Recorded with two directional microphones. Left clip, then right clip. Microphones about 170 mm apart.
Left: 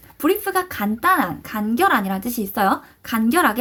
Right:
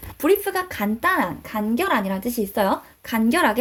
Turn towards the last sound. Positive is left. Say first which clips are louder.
# left 1 dB
turn(degrees=0)  # may be behind; listen again after turning